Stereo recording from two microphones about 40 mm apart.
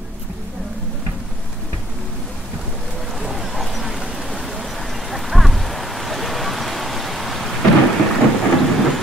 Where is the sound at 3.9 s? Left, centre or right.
Centre.